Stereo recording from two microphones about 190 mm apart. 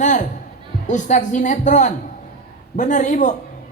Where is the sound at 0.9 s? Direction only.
40° left (ahead or behind).